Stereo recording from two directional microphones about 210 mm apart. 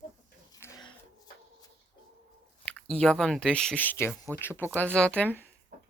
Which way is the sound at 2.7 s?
5° left (ahead or behind).